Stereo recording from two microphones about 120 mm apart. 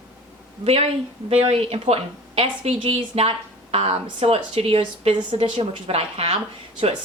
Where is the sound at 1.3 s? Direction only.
55° right (ahead or behind).